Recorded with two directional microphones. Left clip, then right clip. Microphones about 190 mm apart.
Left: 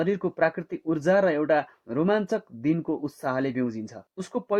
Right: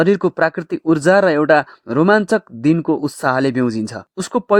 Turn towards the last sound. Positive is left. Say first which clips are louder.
# right 12 dB
turn(degrees=-45)  # may be behind; listen again after turning